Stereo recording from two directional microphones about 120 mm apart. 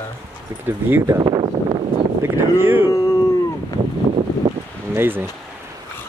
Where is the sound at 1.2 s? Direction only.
40° right (ahead or behind).